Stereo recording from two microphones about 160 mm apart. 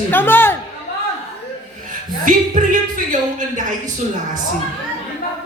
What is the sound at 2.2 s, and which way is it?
Speech, 55° right (ahead or behind).